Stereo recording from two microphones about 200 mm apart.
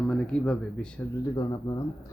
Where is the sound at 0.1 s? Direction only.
5° left (ahead or behind).